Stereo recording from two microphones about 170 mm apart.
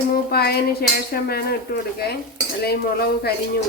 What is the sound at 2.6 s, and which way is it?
Cutlery, 70° left (ahead or behind).